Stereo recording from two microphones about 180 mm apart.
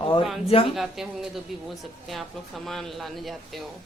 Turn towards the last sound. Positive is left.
turn(degrees=0)  # may be behind; listen again after turning